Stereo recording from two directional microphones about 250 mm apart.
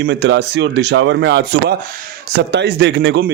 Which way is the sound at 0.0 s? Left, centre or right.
Right.